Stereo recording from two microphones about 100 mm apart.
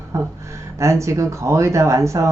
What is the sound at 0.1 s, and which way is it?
Speech, 30° right (ahead or behind).